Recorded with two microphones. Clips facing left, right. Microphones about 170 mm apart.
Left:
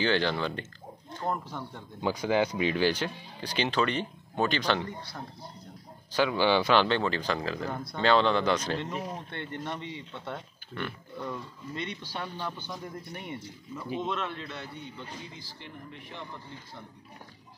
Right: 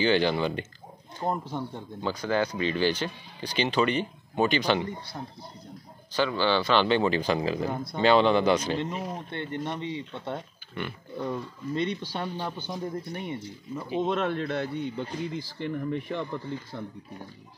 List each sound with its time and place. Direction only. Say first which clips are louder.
0.0 s speech: right 4 dB; 5° right (ahead or behind)
1.2 s speech: right 3 dB; 25° right (ahead or behind)
2.0 s speech: left 1 dB; 15° left (ahead or behind); by 4.8 s 5° right (ahead or behind)
6.1 s speech: even; 10° left (ahead or behind)
6.9 s speech: right 4 dB; 10° right (ahead or behind)
14.0 s speech: right 7 dB; 45° right (ahead or behind); by 16.3 s 90° right